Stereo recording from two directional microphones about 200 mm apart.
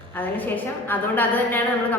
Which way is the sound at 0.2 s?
10° left (ahead or behind).